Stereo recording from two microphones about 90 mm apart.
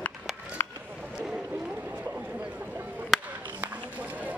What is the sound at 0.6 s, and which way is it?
Run, 20° left (ahead or behind).